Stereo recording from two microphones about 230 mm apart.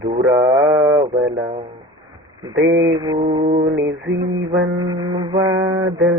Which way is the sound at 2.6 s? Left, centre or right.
Right.